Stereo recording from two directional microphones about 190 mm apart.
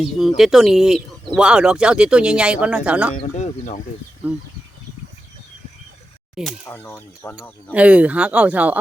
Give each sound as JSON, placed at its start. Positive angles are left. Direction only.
{"t": 0.0, "sound": "speech", "side_deg": 0}
{"t": 3.2, "sound": "speech", "side_deg": 35}
{"t": 6.3, "sound": "speech", "side_deg": 0}
{"t": 7.7, "sound": "speech", "side_deg": -5}